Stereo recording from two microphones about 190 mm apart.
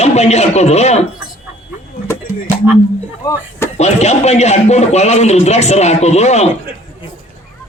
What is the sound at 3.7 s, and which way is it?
A man's voice, 35° left (ahead or behind).